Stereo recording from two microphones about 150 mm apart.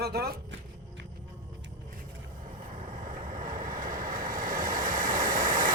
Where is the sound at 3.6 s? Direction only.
65° right (ahead or behind).